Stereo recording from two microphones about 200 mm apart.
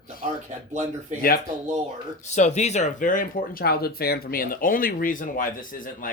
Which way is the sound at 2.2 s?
35° left (ahead or behind).